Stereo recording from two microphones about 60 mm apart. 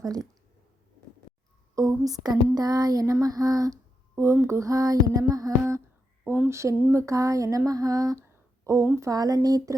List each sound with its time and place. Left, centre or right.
0.0 s speech: right
1.7 s female singing: right
4.2 s a sound: right
6.5 s a sound: right
8.6 s a woman's voice: right
9.0 s female singing: right